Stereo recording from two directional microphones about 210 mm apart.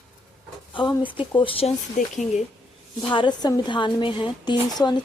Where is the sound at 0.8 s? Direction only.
20° left (ahead or behind).